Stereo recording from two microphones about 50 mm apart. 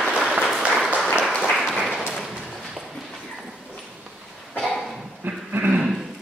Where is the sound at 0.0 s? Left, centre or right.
Centre.